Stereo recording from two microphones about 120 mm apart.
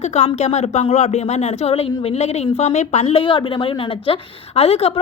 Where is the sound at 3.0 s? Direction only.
50° left (ahead or behind).